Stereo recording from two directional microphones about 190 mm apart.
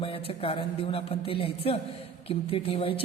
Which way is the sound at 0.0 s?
30° left (ahead or behind).